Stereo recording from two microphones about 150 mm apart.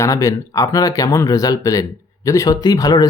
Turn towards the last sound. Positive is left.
turn(degrees=25)  # may be behind; listen again after turning